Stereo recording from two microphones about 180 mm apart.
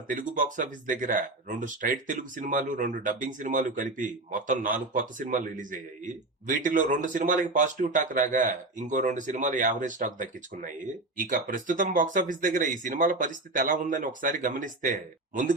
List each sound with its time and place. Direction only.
0.1 s speech: 45° right (ahead or behind)